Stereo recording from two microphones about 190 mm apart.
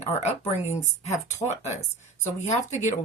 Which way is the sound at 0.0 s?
35° left (ahead or behind).